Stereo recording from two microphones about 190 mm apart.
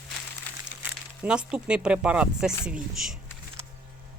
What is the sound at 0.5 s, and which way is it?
Crumpling, 10° left (ahead or behind).